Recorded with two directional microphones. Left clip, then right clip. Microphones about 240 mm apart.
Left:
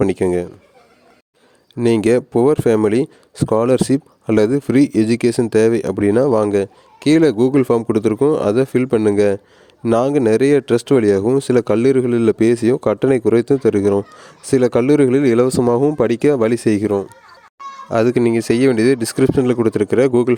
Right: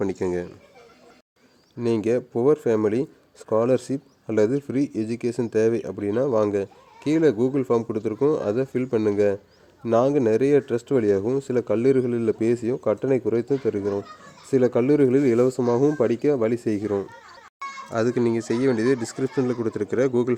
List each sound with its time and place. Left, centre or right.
0.0 s speech: left
1.8 s speech: left